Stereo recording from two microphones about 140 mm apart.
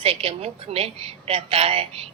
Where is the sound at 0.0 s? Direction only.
45° right (ahead or behind).